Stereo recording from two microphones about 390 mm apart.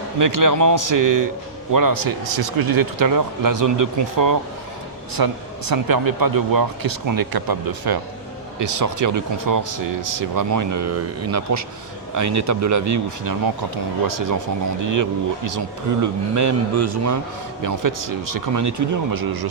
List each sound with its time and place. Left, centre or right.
0.2 s speech: right
8.5 s speech: right
19.1 s speech: right